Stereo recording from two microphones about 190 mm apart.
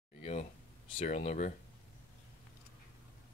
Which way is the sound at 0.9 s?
35° left (ahead or behind).